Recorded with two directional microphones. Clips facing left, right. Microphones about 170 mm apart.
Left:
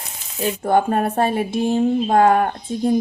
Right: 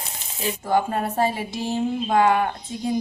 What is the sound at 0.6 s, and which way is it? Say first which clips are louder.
Speech: left 5 dB; 55° left (ahead or behind).